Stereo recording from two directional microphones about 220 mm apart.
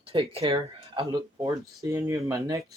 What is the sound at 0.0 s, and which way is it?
Speech, 25° right (ahead or behind).